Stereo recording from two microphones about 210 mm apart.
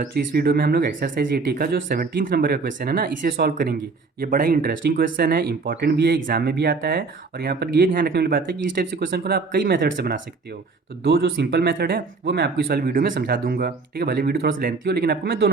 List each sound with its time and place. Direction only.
0.0 s speech: 50° right (ahead or behind)